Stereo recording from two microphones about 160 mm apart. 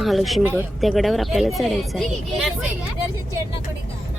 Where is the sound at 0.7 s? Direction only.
Centre (ahead or behind).